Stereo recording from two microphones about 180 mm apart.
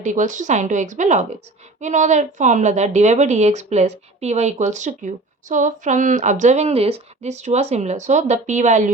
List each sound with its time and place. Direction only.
0.0 s a woman's voice: 45° right (ahead or behind)